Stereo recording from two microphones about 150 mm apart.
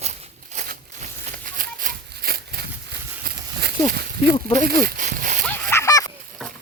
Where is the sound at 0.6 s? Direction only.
65° right (ahead or behind); by 2.7 s 90° right.